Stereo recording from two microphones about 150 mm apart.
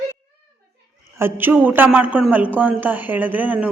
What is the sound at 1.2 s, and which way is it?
A man's voice, 15° right (ahead or behind).